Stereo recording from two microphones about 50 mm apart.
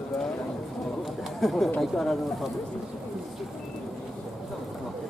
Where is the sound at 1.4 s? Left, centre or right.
Centre.